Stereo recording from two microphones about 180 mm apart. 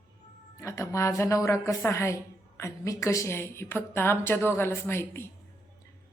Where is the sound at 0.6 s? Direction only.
20° left (ahead or behind).